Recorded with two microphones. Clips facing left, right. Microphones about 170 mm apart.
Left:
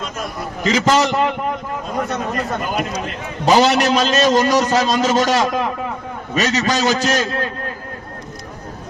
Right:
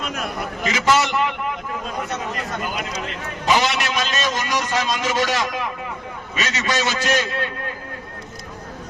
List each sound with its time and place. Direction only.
0.7 s a man's voice: 40° left (ahead or behind)
3.4 s a man's voice: 40° left (ahead or behind)